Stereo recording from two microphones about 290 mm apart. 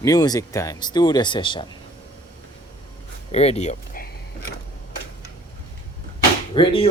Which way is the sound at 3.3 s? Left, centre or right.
Left.